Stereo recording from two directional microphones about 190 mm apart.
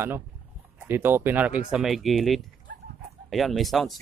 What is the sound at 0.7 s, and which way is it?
Speech, 10° right (ahead or behind).